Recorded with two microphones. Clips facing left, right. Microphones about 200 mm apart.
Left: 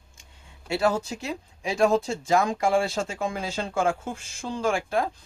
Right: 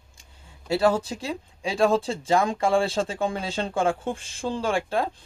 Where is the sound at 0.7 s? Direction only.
30° right (ahead or behind).